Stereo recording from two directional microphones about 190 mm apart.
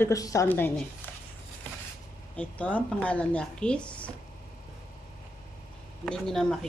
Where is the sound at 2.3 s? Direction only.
5° left (ahead or behind).